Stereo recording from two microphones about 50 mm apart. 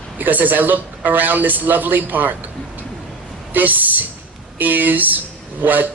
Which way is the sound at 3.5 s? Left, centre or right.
Right.